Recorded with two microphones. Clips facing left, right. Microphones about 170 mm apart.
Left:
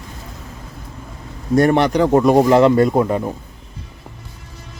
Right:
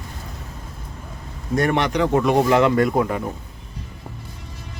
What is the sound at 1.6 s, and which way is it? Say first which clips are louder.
Speech: left 6 dB; 35° left (ahead or behind).